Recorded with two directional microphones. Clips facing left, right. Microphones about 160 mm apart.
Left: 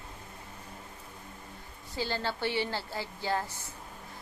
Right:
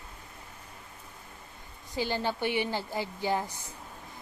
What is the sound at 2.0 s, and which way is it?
A woman's voice, 15° right (ahead or behind).